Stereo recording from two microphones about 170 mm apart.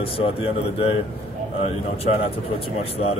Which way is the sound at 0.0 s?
35° left (ahead or behind).